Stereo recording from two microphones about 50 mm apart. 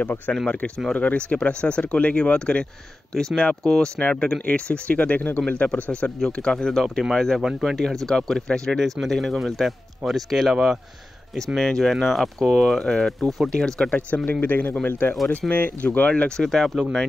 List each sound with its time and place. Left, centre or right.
0.0 s speech: left; by 6.8 s centre
6.8 s speech: centre
10.5 s speech: centre
11.5 s speech: centre; by 16.3 s left
16.3 s speech: centre